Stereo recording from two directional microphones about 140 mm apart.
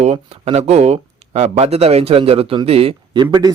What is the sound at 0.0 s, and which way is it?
A man's voice, 50° right (ahead or behind).